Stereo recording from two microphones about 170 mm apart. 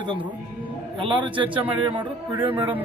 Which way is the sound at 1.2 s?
30° right (ahead or behind).